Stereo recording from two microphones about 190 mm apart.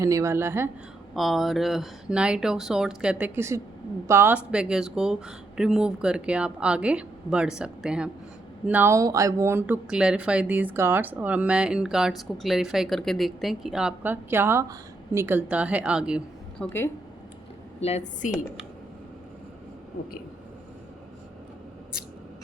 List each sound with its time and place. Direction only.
0.0 s speech: 15° right (ahead or behind)
1.1 s speech: centre (ahead or behind)
16.6 s a woman's voice: 10° left (ahead or behind)
17.7 s a woman's voice: 35° left (ahead or behind)